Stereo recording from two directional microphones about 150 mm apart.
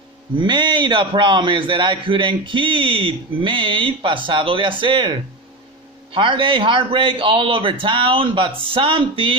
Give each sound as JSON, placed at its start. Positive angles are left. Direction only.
{"t": 0.4, "sound": "a man's voice", "side_deg": -30}
{"t": 6.1, "sound": "a man's voice", "side_deg": -35}